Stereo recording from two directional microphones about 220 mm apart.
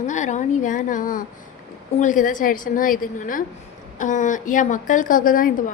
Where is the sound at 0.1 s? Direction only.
35° left (ahead or behind).